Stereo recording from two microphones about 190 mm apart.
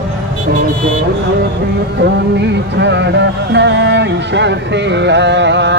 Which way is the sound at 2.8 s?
65° right (ahead or behind).